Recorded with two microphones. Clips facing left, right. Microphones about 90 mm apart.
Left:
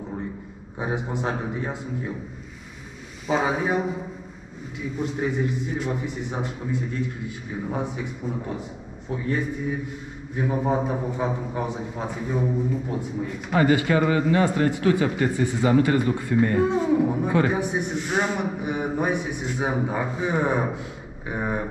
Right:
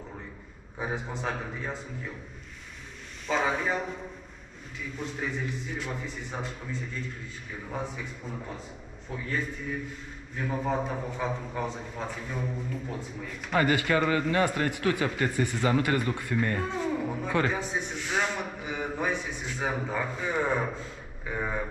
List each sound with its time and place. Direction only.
0.7 s speech: 10° left (ahead or behind)
3.3 s a man's voice: 10° left (ahead or behind)
13.6 s speech: 25° left (ahead or behind)